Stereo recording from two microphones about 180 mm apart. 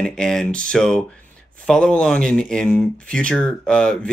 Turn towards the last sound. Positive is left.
turn(degrees=5)  # may be behind; listen again after turning